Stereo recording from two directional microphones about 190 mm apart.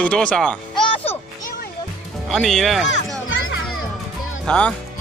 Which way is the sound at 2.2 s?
Centre (ahead or behind).